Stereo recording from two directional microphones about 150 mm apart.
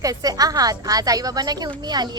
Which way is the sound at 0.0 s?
25° right (ahead or behind).